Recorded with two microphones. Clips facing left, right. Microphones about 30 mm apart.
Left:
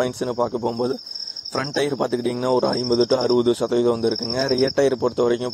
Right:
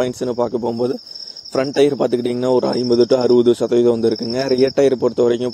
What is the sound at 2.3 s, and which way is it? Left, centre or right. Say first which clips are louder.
Speech: right 4 dB; centre.